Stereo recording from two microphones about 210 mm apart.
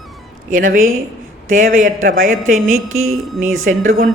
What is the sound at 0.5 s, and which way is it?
A woman's voice, 40° right (ahead or behind).